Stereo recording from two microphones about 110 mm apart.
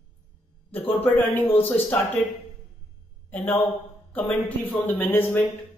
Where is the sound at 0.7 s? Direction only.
15° left (ahead or behind).